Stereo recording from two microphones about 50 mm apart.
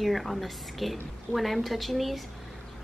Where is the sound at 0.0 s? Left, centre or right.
Centre.